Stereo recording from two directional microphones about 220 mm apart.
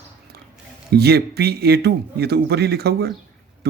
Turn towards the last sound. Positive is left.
turn(degrees=-45)  # may be behind; listen again after turning